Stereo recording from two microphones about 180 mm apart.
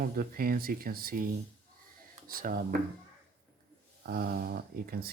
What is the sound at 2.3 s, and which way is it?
Speech, 50° right (ahead or behind).